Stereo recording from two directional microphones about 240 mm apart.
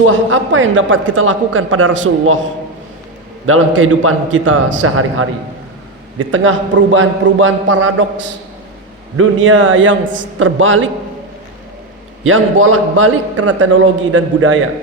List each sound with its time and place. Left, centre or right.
0.0 s a man's voice: right
3.4 s a man's voice: right
9.1 s a man's voice: right
12.2 s a man's voice: right
13.7 s a man's voice: right